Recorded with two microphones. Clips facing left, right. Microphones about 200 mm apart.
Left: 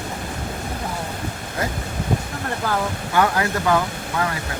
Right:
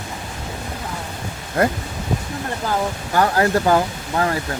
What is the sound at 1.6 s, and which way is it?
Speech, 55° right (ahead or behind).